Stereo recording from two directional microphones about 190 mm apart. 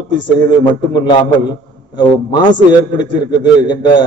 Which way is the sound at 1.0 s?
20° left (ahead or behind).